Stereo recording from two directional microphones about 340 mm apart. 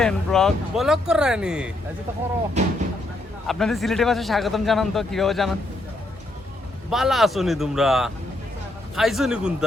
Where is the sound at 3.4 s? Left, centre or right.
Centre.